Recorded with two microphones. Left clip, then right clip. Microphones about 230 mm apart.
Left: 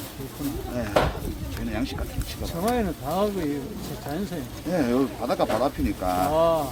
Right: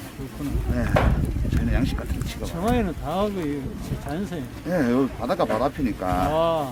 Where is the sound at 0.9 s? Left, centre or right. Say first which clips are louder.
Left 1 dB; left.